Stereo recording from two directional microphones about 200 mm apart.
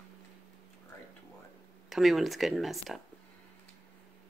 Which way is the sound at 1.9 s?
Centre (ahead or behind).